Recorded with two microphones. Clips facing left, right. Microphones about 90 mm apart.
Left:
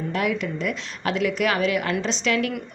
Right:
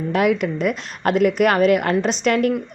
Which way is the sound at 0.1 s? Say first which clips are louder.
Right 8 dB; 55° right (ahead or behind).